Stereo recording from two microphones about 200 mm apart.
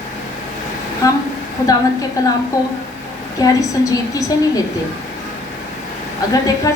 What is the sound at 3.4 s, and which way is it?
A woman's voice, 15° left (ahead or behind).